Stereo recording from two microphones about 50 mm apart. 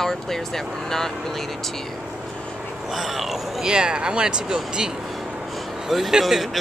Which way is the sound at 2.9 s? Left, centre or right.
Centre.